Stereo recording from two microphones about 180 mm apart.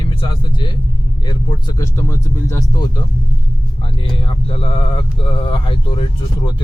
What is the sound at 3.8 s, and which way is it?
Speech, 30° left (ahead or behind).